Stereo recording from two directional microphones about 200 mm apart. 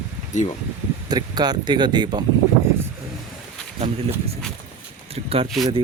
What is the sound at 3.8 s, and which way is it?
Speech, 30° right (ahead or behind).